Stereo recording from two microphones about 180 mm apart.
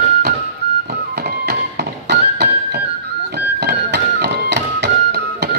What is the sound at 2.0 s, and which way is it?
Music, 65° right (ahead or behind).